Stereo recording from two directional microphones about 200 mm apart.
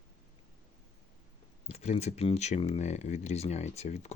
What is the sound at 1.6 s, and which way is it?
Speech, 35° left (ahead or behind).